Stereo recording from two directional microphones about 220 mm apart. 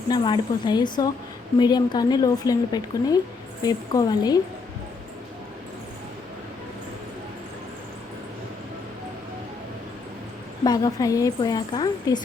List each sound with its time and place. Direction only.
0.1 s a woman's voice: 20° left (ahead or behind)
10.6 s a woman's voice: 15° left (ahead or behind)